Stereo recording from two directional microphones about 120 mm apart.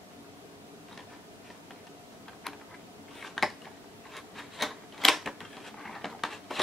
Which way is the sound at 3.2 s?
Centre (ahead or behind).